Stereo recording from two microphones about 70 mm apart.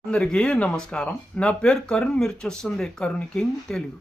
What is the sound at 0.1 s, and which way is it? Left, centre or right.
Speech, centre.